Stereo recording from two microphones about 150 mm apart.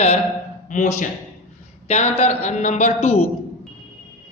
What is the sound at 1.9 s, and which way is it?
A man's voice, 45° left (ahead or behind).